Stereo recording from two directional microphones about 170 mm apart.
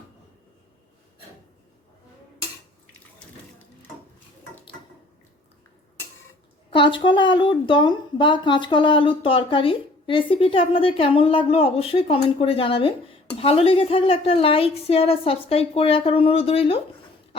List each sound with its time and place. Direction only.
6.7 s speech: 30° left (ahead or behind)